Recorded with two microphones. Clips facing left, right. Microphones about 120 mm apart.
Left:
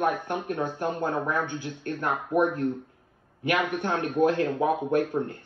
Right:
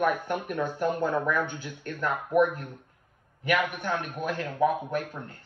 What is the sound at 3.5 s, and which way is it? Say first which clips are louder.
Speech: left 1 dB; 15° left (ahead or behind).